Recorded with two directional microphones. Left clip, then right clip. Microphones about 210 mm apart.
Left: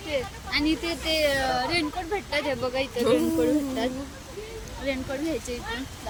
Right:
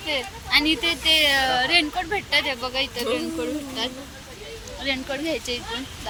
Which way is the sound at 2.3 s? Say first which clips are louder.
Right 3 dB; 30° left (ahead or behind).